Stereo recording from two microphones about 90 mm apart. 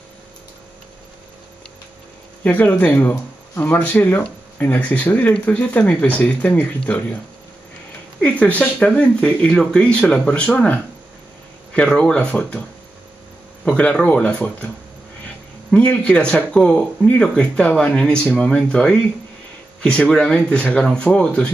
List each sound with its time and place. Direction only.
2.4 s speech: 20° left (ahead or behind)
8.2 s speech: 15° left (ahead or behind)
13.7 s speech: 15° left (ahead or behind)
15.7 s speech: 15° left (ahead or behind)